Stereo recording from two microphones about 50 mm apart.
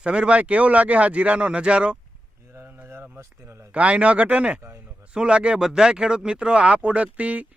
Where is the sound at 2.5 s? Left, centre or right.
Right.